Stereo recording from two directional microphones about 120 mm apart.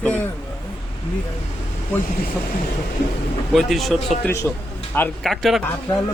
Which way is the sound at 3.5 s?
Centre (ahead or behind).